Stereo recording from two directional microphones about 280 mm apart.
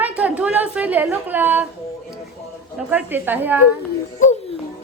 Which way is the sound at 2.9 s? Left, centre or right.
Centre.